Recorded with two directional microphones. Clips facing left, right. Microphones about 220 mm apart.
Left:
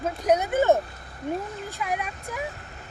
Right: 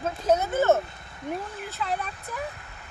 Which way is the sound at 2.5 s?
35° left (ahead or behind).